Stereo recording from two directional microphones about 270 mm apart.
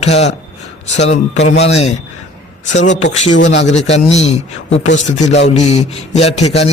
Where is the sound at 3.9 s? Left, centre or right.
Left.